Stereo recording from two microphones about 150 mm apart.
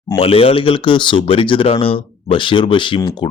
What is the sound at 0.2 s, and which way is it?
Speech, 40° left (ahead or behind).